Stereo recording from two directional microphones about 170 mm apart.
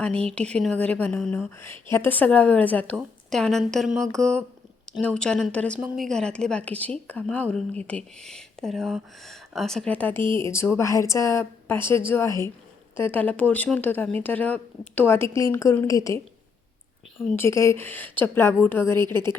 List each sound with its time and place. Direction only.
0.3 s a woman's voice: 5° left (ahead or behind)
17.3 s a woman's voice: 15° left (ahead or behind)